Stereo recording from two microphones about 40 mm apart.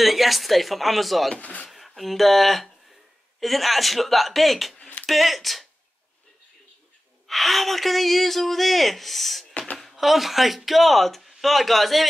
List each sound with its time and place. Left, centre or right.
0.0 s speech: centre
1.4 s speech: left
1.7 s speech: centre
4.7 s a sound: left
5.0 s speech: centre
7.2 s speech: centre
9.5 s a sound: left
9.8 s speech: centre